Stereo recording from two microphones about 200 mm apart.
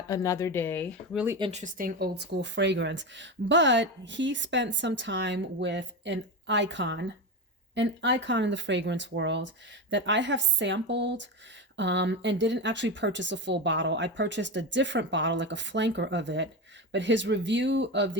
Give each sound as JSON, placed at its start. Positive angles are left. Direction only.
{"t": 0.1, "sound": "speech", "side_deg": 15}
{"t": 1.1, "sound": "speech", "side_deg": -10}
{"t": 1.4, "sound": "speech", "side_deg": -35}